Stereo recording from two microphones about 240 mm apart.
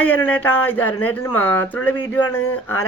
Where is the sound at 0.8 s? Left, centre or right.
Left.